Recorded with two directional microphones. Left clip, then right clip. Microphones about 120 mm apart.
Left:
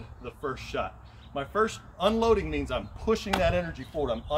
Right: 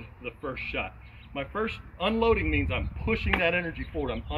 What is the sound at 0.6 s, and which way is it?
Speech, 55° left (ahead or behind).